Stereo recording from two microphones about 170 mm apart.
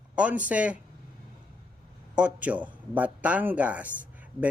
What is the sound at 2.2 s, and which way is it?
A man's voice, 10° right (ahead or behind).